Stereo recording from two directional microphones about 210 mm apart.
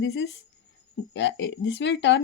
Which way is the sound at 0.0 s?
55° left (ahead or behind).